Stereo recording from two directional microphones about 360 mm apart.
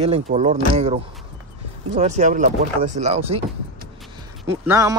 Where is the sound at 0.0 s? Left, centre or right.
Centre.